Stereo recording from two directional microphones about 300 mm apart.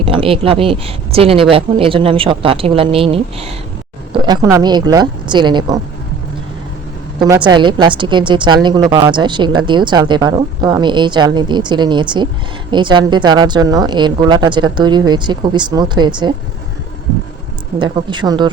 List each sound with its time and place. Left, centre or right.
0.0 s a woman's voice: centre
7.2 s a woman's voice: centre
17.7 s a woman's voice: centre